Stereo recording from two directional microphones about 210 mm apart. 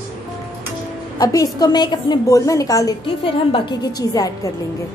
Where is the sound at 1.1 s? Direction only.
15° left (ahead or behind).